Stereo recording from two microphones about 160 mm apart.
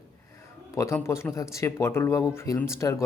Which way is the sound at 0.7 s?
20° left (ahead or behind).